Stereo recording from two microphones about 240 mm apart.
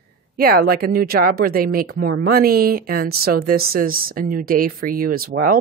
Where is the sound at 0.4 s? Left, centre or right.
Right.